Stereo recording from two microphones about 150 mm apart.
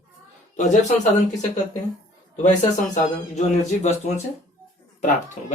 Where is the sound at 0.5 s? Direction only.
55° left (ahead or behind).